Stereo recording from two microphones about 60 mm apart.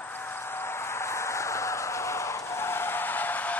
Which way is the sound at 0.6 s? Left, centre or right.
Left.